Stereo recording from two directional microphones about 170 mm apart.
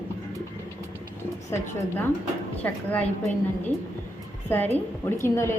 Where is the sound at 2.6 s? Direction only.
10° left (ahead or behind).